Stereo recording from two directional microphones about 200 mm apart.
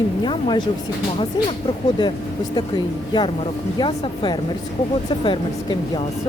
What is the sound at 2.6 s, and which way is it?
Speech, 20° left (ahead or behind).